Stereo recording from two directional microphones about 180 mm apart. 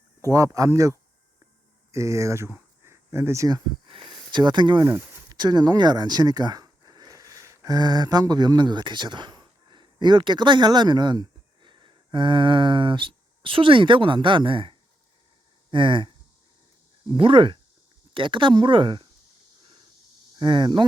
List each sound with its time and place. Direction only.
0.3 s speech: 20° right (ahead or behind)
20.4 s speech: 25° right (ahead or behind)